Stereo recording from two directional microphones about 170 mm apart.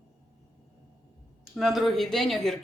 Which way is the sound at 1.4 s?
Centre (ahead or behind).